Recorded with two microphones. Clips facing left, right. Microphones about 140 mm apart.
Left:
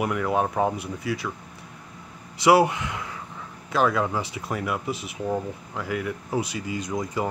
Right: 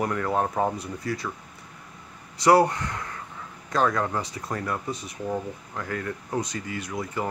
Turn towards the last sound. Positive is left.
turn(degrees=20)  # may be behind; listen again after turning